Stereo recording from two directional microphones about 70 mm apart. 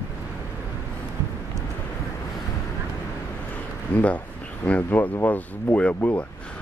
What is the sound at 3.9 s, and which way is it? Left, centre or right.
Speech, left.